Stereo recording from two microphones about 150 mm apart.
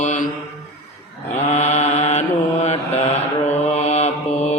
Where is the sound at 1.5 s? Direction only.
50° left (ahead or behind).